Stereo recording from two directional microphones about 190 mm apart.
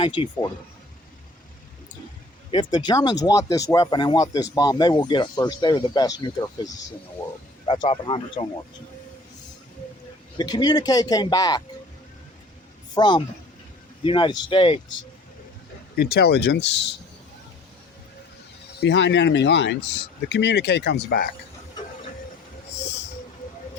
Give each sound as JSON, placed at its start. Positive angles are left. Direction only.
{"t": 0.0, "sound": "speech", "side_deg": 25}
{"t": 2.5, "sound": "speech", "side_deg": 25}
{"t": 7.7, "sound": "speech", "side_deg": 25}
{"t": 10.3, "sound": "speech", "side_deg": 20}
{"t": 12.9, "sound": "speech", "side_deg": 25}
{"t": 16.0, "sound": "speech", "side_deg": 55}
{"t": 18.8, "sound": "speech", "side_deg": 70}